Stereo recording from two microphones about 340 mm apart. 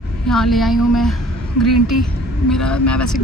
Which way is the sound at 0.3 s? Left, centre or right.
Centre.